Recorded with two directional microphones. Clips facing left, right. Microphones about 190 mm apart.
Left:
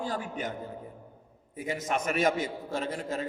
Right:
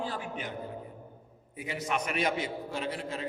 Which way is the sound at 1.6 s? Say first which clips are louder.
Left 2 dB; 45° left (ahead or behind).